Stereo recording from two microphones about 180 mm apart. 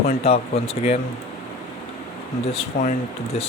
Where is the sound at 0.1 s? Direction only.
35° left (ahead or behind).